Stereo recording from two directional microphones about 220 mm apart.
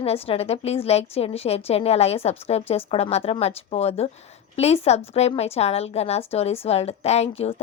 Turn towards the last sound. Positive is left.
turn(degrees=30)  # may be behind; listen again after turning